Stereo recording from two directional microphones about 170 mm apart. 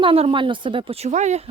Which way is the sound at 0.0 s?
35° right (ahead or behind).